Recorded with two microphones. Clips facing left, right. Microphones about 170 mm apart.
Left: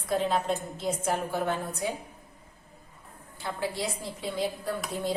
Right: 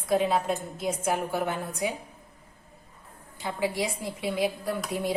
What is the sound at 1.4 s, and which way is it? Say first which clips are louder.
Speech: even; 15° right (ahead or behind).